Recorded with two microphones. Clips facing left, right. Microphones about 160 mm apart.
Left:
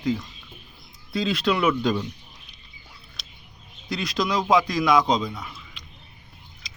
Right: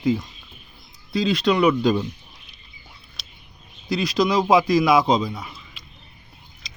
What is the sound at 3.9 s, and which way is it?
A man's voice, centre (ahead or behind).